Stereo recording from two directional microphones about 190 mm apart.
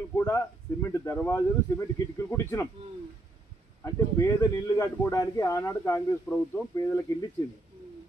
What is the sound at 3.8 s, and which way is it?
Speech, 15° left (ahead or behind).